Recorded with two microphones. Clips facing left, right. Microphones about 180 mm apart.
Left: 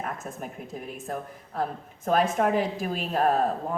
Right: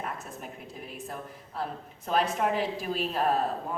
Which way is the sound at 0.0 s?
45° left (ahead or behind).